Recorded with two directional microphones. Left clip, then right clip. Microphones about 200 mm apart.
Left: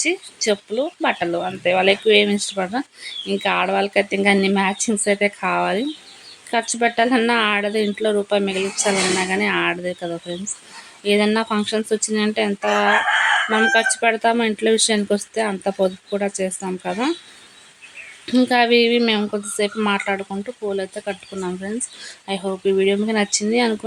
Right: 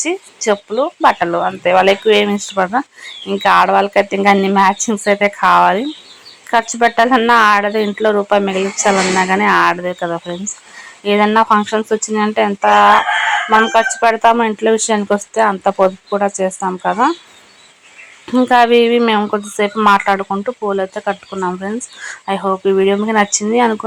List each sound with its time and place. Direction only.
0.0 s speech: 5° right (ahead or behind)
18.4 s speech: centre (ahead or behind)